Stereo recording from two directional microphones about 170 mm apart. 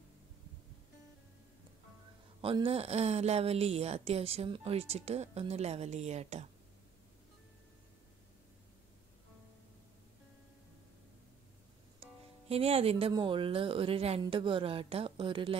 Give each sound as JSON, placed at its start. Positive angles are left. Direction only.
{"t": 2.4, "sound": "a woman's voice", "side_deg": -30}
{"t": 12.4, "sound": "a woman's voice", "side_deg": -35}